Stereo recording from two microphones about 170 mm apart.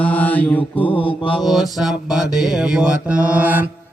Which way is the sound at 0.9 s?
30° left (ahead or behind).